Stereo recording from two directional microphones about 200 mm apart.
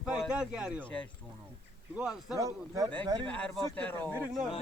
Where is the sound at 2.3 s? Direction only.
15° right (ahead or behind).